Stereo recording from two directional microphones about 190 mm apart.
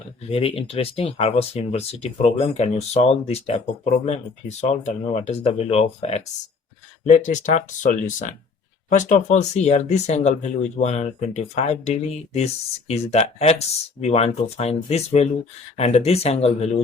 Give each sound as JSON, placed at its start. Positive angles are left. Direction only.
{"t": 0.3, "sound": "speech", "side_deg": 30}